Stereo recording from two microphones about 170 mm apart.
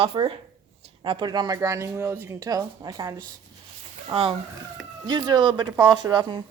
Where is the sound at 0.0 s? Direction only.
35° right (ahead or behind).